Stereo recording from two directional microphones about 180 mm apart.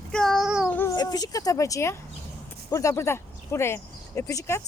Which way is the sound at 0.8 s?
20° left (ahead or behind).